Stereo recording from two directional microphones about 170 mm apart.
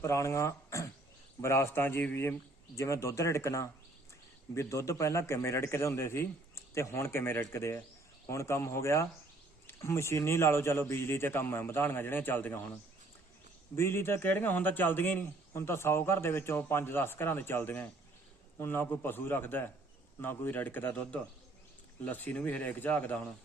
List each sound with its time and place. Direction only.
0.0 s a man's voice: 15° left (ahead or behind)
13.7 s a man's voice: 15° left (ahead or behind)